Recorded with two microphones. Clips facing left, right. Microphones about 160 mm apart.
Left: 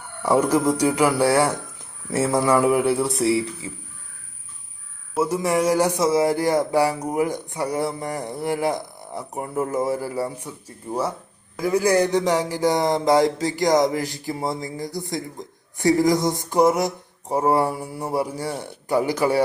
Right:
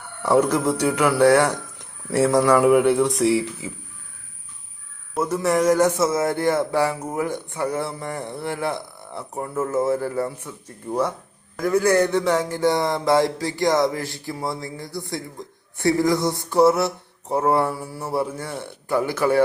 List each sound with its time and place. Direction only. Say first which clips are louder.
0.2 s speech: even; 10° left (ahead or behind)
5.1 s speech: even; 10° left (ahead or behind)